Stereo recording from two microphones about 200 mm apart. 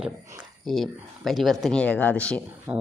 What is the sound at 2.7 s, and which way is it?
Speech, 5° right (ahead or behind).